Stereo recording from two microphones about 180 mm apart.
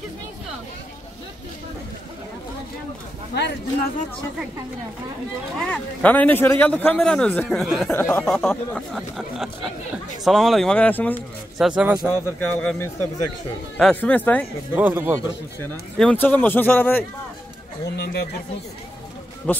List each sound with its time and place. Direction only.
3.3 s speech: 70° left (ahead or behind)
5.6 s a man's voice: 10° left (ahead or behind)
7.9 s a man's voice: 15° left (ahead or behind)
8.5 s speech: centre (ahead or behind)
11.5 s speech: 5° right (ahead or behind)
12.5 s a man's voice: 10° left (ahead or behind)
14.8 s a man's voice: 10° right (ahead or behind)
15.6 s a man's voice: 10° left (ahead or behind)
17.9 s speech: 65° left (ahead or behind)
19.5 s a man's voice: 10° left (ahead or behind)